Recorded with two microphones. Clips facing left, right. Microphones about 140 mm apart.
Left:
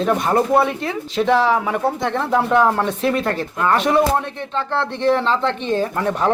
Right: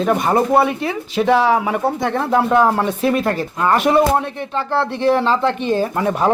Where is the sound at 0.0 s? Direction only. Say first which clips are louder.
Right 1 dB; 5° right (ahead or behind).